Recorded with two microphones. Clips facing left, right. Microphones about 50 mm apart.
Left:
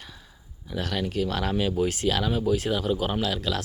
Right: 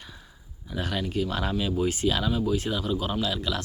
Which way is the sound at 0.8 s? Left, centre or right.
Centre.